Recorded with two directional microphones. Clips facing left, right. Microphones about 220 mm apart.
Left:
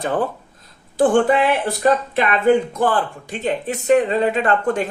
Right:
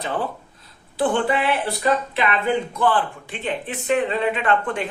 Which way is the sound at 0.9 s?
45° left (ahead or behind).